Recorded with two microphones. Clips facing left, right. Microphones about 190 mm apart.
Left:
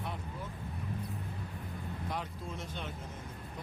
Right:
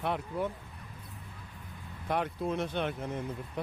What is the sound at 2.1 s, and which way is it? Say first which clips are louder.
Speech: right 11 dB; 65° right (ahead or behind).